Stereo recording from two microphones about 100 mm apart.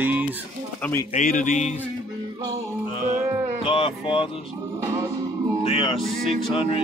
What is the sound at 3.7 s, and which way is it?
Speech, 70° left (ahead or behind).